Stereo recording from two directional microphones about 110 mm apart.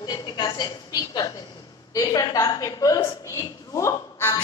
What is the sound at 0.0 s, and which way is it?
A woman's voice, 40° left (ahead or behind).